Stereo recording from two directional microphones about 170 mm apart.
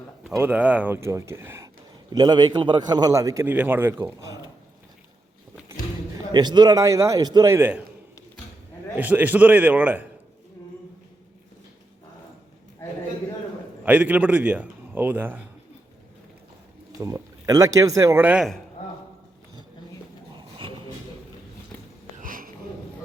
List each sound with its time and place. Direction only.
0.3 s speech: 10° right (ahead or behind)
6.3 s a man's voice: 25° right (ahead or behind); by 7.9 s 10° right (ahead or behind)
9.0 s speech: 10° right (ahead or behind)
13.8 s speech: 10° right (ahead or behind)
17.0 s speech: 20° right (ahead or behind)
22.2 s a sound: 55° right (ahead or behind)